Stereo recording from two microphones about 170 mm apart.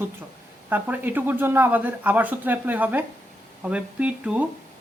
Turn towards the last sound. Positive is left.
turn(degrees=-10)  # may be behind; listen again after turning